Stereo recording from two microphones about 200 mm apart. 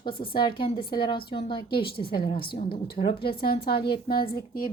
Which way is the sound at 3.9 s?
50° left (ahead or behind).